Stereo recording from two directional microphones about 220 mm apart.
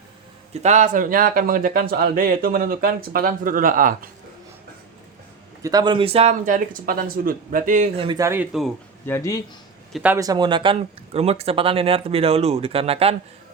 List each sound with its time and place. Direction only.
0.5 s speech: 30° right (ahead or behind)
5.6 s speech: 20° right (ahead or behind); by 8.0 s 35° right (ahead or behind)
8.0 s speech: 15° right (ahead or behind)
9.0 s speech: 15° left (ahead or behind)
9.9 s speech: 5° right (ahead or behind); by 13.1 s 25° right (ahead or behind)